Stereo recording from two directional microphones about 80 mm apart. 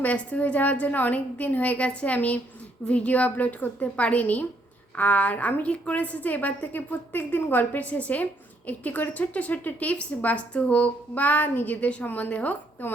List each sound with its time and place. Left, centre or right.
0.0 s a woman's voice: centre